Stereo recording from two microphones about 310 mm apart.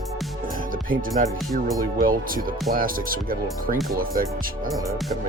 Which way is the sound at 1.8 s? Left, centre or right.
Right.